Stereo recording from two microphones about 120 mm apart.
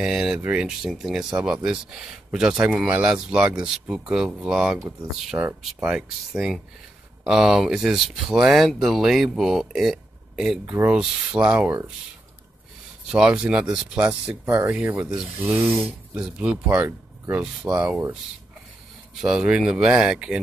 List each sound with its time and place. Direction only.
0.0 s speech: 5° right (ahead or behind)
13.1 s speech: 5° right (ahead or behind)
14.4 s speech: 20° right (ahead or behind)
15.8 s speech: 5° right (ahead or behind)
19.2 s speech: 5° right (ahead or behind)